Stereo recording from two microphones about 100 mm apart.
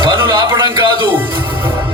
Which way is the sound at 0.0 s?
55° right (ahead or behind).